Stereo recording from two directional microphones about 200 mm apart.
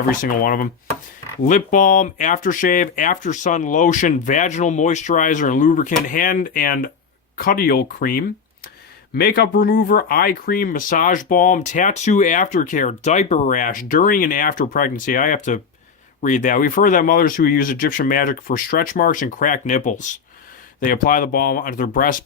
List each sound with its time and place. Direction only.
0.2 s speech: 45° left (ahead or behind)